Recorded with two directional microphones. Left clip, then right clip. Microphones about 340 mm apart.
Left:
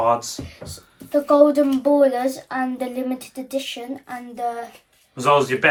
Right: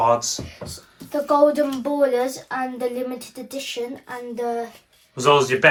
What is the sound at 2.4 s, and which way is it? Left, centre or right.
Speech, centre.